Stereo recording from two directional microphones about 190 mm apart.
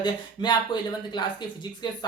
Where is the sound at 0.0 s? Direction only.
25° left (ahead or behind).